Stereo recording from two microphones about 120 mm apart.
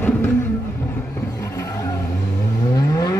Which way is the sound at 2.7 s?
30° left (ahead or behind).